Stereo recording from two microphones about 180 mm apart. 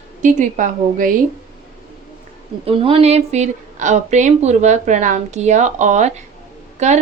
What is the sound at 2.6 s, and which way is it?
A woman's voice, 30° right (ahead or behind).